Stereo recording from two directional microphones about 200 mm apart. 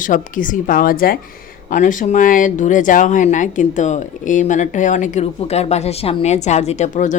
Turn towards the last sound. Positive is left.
turn(degrees=35)  # may be behind; listen again after turning